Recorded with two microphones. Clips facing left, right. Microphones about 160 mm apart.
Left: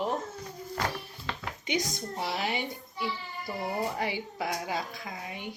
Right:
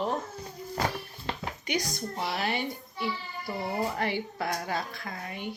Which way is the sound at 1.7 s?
20° left (ahead or behind).